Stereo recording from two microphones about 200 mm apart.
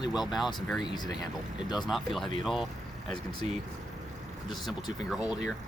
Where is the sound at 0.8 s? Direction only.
20° left (ahead or behind).